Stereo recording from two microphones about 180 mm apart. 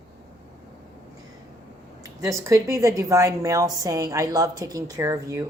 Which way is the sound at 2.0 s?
15° right (ahead or behind).